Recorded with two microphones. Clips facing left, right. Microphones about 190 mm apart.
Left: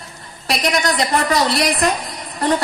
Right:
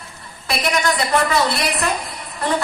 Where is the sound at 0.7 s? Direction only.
35° left (ahead or behind).